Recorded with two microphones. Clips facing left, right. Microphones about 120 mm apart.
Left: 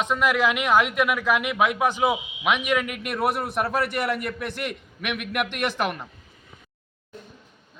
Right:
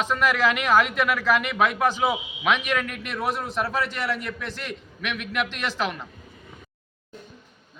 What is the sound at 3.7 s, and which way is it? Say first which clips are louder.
A man's voice: left 2 dB; 55° left (ahead or behind).